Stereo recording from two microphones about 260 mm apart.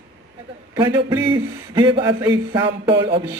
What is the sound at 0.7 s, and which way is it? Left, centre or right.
A man's voice, centre.